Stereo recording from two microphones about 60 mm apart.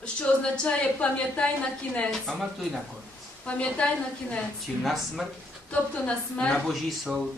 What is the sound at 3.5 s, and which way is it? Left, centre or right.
Speech, centre.